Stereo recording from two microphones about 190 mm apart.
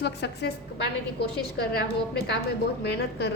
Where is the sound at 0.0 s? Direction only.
65° left (ahead or behind).